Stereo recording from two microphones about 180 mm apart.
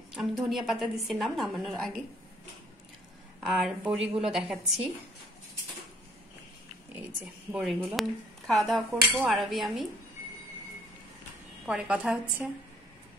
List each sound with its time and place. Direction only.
0.1 s speech: centre (ahead or behind)
3.4 s speech: centre (ahead or behind)
7.5 s speech: centre (ahead or behind)
11.6 s speech: 5° right (ahead or behind)